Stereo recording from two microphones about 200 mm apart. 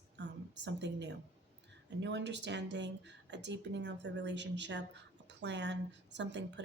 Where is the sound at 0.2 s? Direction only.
60° right (ahead or behind).